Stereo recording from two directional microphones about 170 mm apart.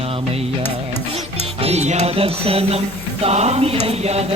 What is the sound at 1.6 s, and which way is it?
Music, 40° right (ahead or behind).